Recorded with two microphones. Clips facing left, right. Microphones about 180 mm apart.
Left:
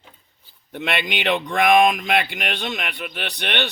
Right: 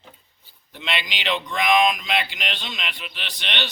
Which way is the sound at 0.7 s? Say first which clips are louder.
Left 5 dB; 55° left (ahead or behind).